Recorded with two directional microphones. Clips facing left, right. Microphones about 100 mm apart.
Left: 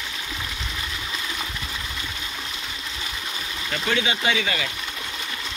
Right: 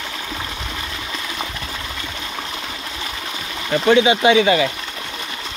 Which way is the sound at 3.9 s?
20° right (ahead or behind).